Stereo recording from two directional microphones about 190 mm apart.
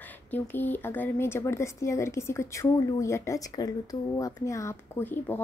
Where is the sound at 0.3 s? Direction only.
10° left (ahead or behind).